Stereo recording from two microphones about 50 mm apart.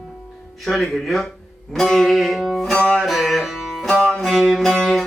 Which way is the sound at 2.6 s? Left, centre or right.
Centre.